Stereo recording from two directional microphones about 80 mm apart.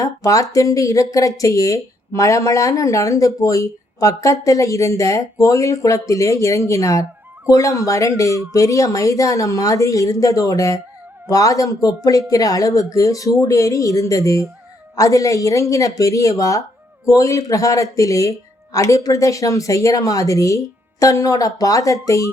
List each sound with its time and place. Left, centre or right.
0.0 s speech: left